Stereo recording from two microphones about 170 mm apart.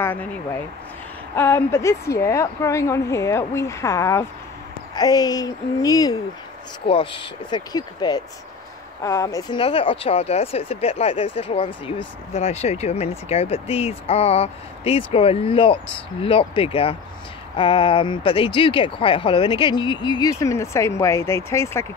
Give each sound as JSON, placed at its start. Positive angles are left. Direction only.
{"t": 0.0, "sound": "speech", "side_deg": 10}
{"t": 1.3, "sound": "a woman's voice", "side_deg": 15}
{"t": 6.9, "sound": "speech", "side_deg": 30}
{"t": 9.6, "sound": "speech", "side_deg": 35}